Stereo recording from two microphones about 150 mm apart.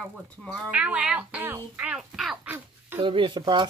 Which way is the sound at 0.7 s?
10° right (ahead or behind).